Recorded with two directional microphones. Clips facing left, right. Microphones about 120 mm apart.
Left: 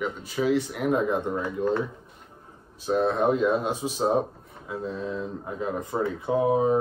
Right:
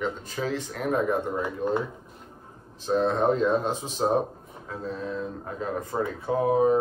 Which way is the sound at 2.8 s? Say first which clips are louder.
Even; 5° left (ahead or behind).